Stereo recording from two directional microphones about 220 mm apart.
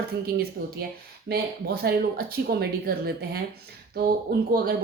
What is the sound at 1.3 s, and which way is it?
Speech, 45° right (ahead or behind).